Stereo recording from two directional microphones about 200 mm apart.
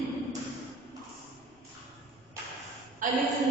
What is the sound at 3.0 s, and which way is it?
Speech, 40° right (ahead or behind).